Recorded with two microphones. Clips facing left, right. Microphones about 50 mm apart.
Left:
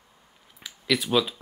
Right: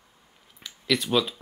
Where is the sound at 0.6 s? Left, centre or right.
Centre.